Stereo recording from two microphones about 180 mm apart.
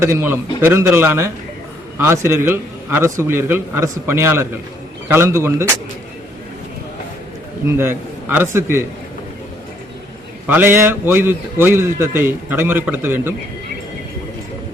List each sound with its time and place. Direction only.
0.0 s a man's voice: 15° right (ahead or behind)
7.8 s a man's voice: 10° right (ahead or behind)
10.4 s a man's voice: 10° right (ahead or behind)